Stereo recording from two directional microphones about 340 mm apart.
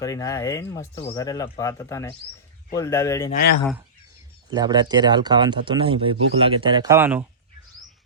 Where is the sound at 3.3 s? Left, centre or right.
Left.